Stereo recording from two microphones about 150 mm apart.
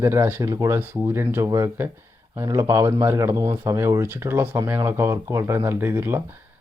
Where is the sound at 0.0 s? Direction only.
15° right (ahead or behind).